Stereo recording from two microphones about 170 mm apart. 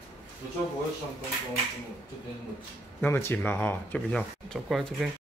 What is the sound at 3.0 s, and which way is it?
Speech, 15° left (ahead or behind).